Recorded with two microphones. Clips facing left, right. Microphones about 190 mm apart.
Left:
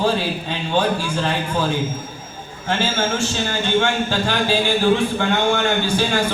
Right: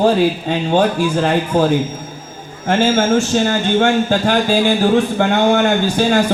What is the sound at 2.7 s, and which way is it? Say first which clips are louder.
A man's voice: right 8 dB; 50° right (ahead or behind).